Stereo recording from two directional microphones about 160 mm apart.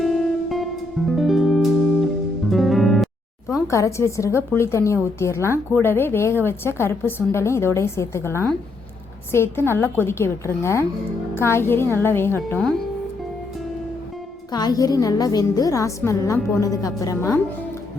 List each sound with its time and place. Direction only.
0.0 s music: centre (ahead or behind)
3.7 s a woman's voice: 20° left (ahead or behind)
14.5 s a woman's voice: 25° left (ahead or behind)